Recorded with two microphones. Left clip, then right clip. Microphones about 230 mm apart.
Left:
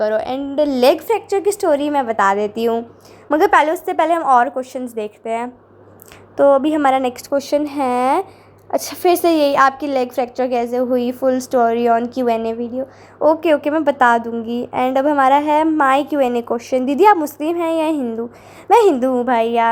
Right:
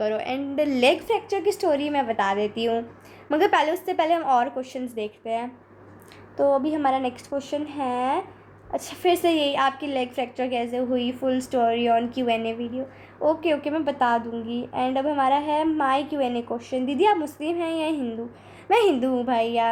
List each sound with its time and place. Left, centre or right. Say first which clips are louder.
0.0 s a woman's voice: left 7 dB; left